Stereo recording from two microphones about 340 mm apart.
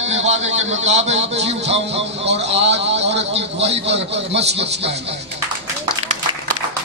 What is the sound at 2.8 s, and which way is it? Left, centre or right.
A man's voice, right.